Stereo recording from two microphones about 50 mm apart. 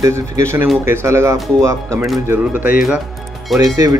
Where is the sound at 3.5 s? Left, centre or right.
Centre.